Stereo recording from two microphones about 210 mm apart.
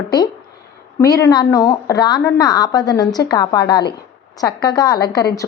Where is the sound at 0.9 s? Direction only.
15° left (ahead or behind).